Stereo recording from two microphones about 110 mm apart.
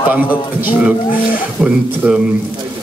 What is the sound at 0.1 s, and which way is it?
A man's voice, 15° right (ahead or behind).